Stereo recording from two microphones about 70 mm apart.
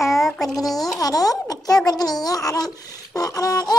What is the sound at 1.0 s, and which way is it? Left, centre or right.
A child's voice, left.